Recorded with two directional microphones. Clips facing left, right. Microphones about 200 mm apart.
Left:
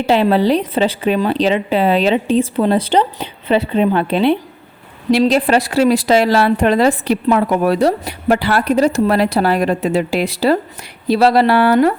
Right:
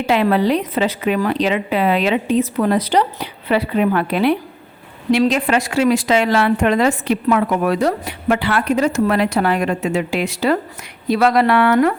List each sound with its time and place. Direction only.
0.0 s a woman's voice: 30° left (ahead or behind)